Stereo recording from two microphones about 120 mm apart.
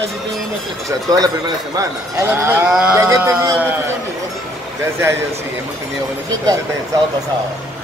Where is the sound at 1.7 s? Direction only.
25° right (ahead or behind).